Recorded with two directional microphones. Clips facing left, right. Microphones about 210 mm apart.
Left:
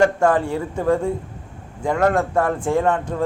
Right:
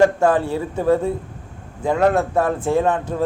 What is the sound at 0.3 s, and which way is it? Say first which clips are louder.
Speech: right 1 dB; 20° right (ahead or behind).